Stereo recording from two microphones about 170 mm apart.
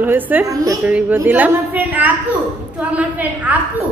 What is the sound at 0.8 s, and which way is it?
A woman's voice, 10° right (ahead or behind).